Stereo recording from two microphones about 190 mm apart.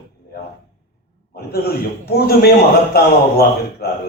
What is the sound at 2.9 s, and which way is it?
Speech, 55° left (ahead or behind).